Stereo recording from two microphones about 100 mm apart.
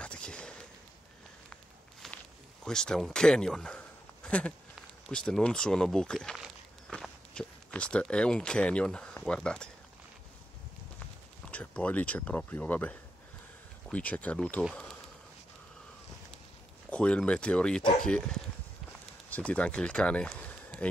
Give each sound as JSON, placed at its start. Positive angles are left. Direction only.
{"t": 0.0, "sound": "a sound", "side_deg": 10}
{"t": 1.5, "sound": "walk", "side_deg": 5}
{"t": 2.6, "sound": "a man's voice", "side_deg": 5}
{"t": 11.5, "sound": "speech", "side_deg": 15}
{"t": 13.9, "sound": "speech", "side_deg": 15}
{"t": 16.9, "sound": "speech", "side_deg": 10}
{"t": 20.2, "sound": "a sound", "side_deg": 15}
{"t": 20.8, "sound": "speech", "side_deg": 10}